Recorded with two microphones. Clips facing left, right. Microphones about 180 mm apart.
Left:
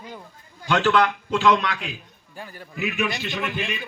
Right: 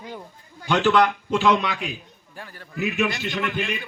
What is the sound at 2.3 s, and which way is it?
Speech, 10° left (ahead or behind).